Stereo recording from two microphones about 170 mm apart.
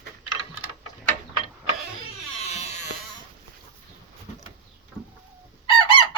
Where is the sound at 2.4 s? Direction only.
40° left (ahead or behind).